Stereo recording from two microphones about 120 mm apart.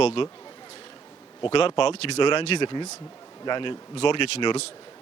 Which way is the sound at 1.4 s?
45° left (ahead or behind).